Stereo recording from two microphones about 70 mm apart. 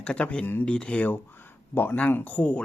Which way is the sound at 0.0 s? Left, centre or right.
Centre.